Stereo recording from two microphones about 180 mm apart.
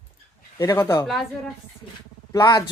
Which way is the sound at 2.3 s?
20° left (ahead or behind).